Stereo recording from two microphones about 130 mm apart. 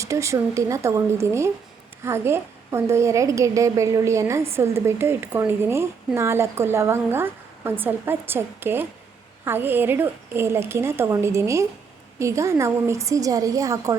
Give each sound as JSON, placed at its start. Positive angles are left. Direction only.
{"t": 0.0, "sound": "a woman's voice", "side_deg": -25}